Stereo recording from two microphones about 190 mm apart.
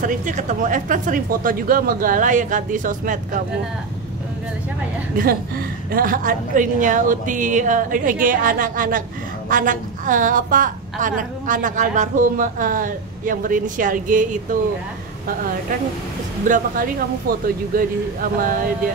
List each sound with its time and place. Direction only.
0.0 s a woman's voice: 45° right (ahead or behind)
5.1 s a woman's voice: 50° right (ahead or behind)
16.4 s a woman's voice: 45° right (ahead or behind)